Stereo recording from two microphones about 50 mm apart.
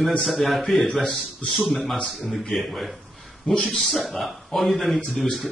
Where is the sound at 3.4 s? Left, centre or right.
Left.